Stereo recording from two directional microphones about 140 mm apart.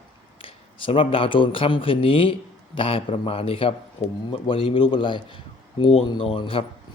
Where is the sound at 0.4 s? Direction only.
40° left (ahead or behind).